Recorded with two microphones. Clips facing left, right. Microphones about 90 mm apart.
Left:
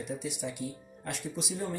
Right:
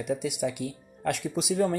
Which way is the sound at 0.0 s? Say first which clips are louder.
Right 7 dB; 70° right (ahead or behind).